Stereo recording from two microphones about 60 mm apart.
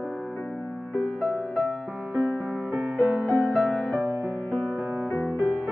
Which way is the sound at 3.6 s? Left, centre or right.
Left.